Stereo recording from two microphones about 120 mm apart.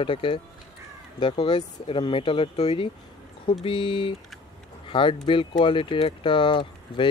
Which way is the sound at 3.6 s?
45° left (ahead or behind).